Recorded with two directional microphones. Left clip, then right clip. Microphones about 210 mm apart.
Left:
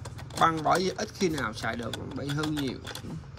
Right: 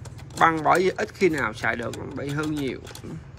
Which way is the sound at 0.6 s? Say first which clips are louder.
Right 6 dB; 15° left (ahead or behind).